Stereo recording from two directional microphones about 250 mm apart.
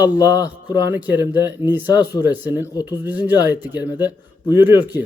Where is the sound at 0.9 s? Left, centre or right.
Centre.